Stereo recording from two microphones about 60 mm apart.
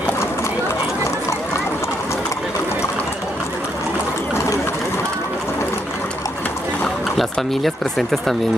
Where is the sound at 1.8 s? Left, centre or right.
Left.